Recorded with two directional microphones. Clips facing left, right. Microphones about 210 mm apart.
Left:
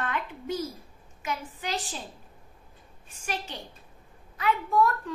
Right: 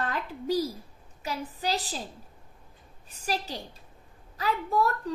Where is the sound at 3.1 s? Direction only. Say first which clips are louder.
Right 3 dB; 35° right (ahead or behind).